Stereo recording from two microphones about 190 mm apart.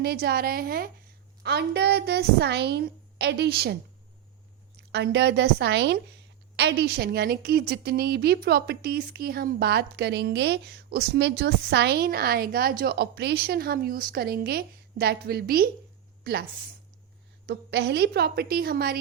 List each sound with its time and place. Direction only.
0.0 s a woman's voice: 60° right (ahead or behind)
4.9 s a woman's voice: 65° right (ahead or behind)
17.4 s a woman's voice: 65° right (ahead or behind)